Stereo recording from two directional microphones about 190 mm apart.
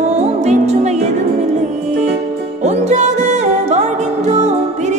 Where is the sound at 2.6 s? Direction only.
35° right (ahead or behind).